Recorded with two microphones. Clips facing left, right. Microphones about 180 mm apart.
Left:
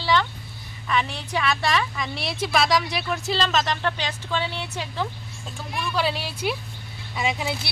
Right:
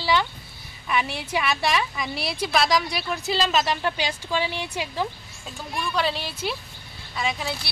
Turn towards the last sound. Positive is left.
turn(degrees=20)  # may be behind; listen again after turning